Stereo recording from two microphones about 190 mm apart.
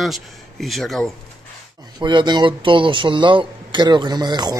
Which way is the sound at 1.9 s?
25° right (ahead or behind).